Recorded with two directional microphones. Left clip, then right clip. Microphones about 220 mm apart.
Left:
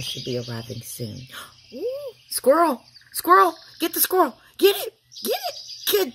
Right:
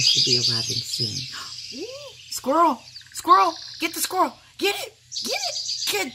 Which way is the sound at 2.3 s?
20° left (ahead or behind).